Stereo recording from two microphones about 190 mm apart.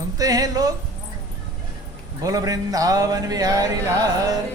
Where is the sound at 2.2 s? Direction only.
20° right (ahead or behind).